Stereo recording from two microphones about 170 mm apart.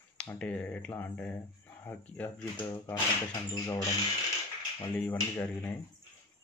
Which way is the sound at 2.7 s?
20° left (ahead or behind).